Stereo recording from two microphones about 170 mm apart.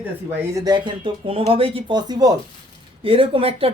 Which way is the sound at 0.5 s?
25° right (ahead or behind).